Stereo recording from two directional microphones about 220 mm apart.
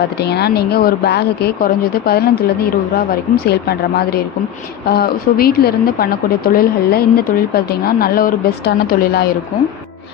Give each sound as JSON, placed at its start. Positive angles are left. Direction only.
{"t": 0.2, "sound": "speech", "side_deg": 50}